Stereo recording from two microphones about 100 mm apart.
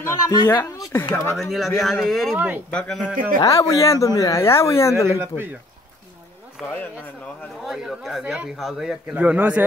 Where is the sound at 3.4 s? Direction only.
35° left (ahead or behind).